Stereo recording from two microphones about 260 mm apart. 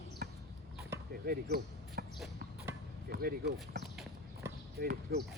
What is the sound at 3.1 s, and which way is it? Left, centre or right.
Speech, right.